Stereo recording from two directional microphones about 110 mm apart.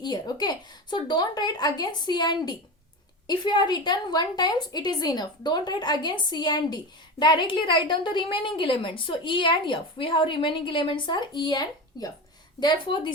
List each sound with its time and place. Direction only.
0.0 s a woman's voice: 40° left (ahead or behind)